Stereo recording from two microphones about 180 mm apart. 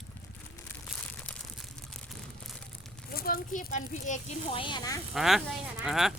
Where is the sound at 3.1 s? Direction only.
55° left (ahead or behind).